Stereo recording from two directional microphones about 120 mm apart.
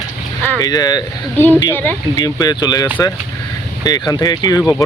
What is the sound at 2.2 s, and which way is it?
Speech, 35° left (ahead or behind).